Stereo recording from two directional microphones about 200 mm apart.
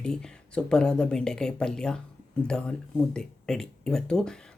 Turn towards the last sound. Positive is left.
turn(degrees=5)  # may be behind; listen again after turning